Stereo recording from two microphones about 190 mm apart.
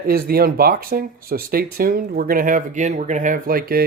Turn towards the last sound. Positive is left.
turn(degrees=-50)  # may be behind; listen again after turning